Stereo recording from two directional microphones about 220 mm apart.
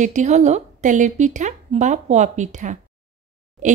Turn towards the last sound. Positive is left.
turn(degrees=-35)  # may be behind; listen again after turning